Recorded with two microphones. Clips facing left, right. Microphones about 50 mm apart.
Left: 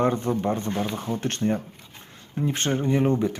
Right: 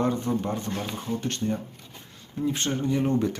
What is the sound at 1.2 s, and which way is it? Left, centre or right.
Speech, left.